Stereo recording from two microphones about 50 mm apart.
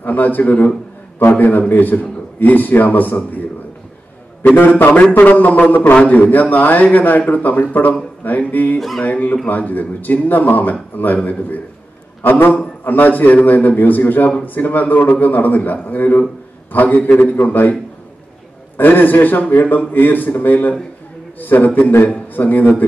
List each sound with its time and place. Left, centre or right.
0.0 s a man's voice: left
4.6 s a man's voice: left
8.7 s music: centre
9.0 s a man's voice: left
18.8 s a man's voice: left